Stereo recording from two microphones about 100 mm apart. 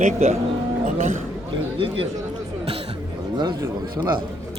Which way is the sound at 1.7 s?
65° right (ahead or behind).